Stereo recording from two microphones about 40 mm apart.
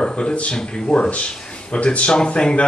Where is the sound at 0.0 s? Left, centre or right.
Left.